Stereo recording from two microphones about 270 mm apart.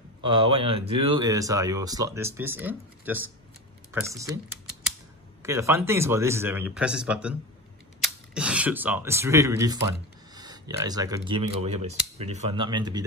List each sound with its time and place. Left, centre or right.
0.2 s speech: centre
5.4 s speech: centre